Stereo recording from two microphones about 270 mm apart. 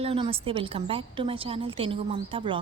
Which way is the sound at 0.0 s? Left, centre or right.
Right.